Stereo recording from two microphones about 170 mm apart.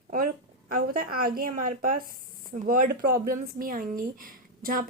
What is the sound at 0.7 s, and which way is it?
Speech, 55° right (ahead or behind).